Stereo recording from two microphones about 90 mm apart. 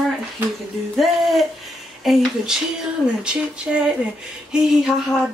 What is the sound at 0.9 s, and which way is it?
Speech, centre (ahead or behind).